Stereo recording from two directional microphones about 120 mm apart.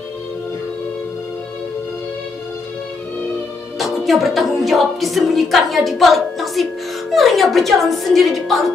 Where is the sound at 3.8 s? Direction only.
Centre (ahead or behind).